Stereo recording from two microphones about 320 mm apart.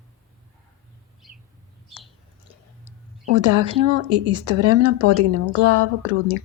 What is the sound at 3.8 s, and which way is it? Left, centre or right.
Speech, right.